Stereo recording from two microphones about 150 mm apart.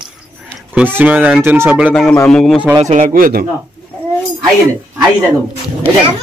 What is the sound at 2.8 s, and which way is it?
Speech, 55° right (ahead or behind).